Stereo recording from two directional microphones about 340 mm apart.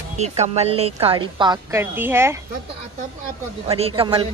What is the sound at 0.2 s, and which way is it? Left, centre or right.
Speech, centre.